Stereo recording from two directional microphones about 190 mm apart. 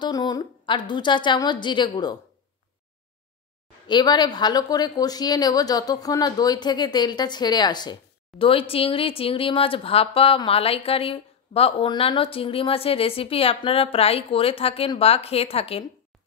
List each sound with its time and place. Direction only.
0.0 s a woman's voice: 20° left (ahead or behind)
3.8 s a woman's voice: 20° left (ahead or behind)